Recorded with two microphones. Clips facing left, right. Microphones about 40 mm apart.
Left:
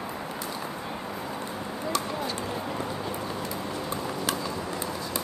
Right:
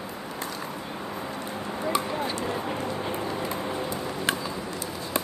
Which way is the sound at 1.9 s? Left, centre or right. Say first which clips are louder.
Right 1 dB; centre.